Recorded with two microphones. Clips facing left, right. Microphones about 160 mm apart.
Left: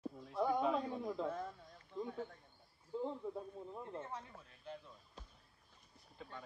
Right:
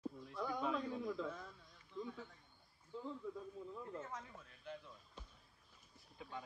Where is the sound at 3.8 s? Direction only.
30° left (ahead or behind).